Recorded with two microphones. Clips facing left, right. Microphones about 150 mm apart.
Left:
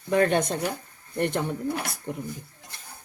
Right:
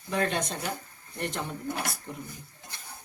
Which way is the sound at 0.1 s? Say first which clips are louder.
Left 7 dB; 55° left (ahead or behind).